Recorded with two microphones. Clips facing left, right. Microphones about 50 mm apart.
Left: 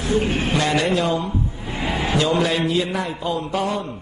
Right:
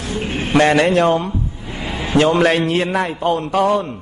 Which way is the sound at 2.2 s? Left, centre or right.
Right.